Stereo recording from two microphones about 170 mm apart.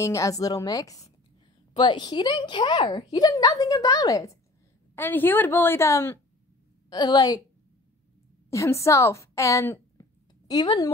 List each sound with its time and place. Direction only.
0.0 s a woman's voice: 20° left (ahead or behind)
8.5 s a woman's voice: 15° left (ahead or behind)